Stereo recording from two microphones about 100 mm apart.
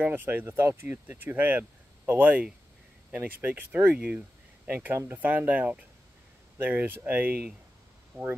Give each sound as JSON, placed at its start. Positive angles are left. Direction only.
{"t": 0.0, "sound": "speech", "side_deg": -20}